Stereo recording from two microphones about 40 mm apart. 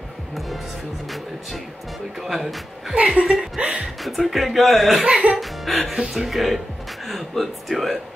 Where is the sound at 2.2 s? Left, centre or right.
Centre.